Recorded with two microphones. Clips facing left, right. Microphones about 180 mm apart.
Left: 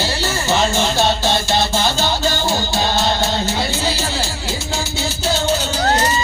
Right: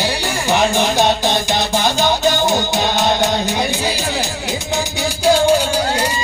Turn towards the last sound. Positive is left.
turn(degrees=-10)  # may be behind; listen again after turning